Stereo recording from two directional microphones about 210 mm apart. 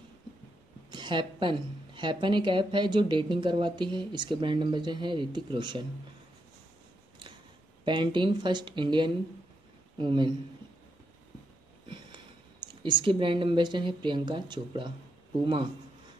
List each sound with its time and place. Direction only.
0.8 s a woman's voice: 20° right (ahead or behind)
7.8 s a woman's voice: 20° right (ahead or behind)
12.8 s a woman's voice: 25° right (ahead or behind)